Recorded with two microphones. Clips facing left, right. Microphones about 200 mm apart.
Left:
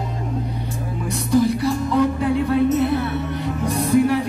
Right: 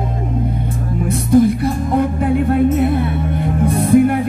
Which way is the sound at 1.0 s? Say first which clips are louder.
Right 6 dB; 55° right (ahead or behind).